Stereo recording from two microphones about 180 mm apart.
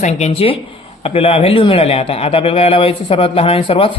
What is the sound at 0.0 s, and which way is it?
A man's voice, 35° left (ahead or behind).